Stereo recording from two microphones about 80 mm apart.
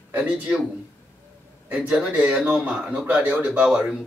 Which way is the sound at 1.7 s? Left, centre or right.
Centre.